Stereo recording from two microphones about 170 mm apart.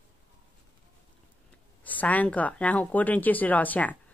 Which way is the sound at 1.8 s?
10° left (ahead or behind).